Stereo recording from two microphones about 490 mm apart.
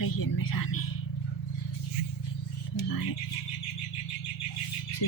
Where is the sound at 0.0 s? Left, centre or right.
Left.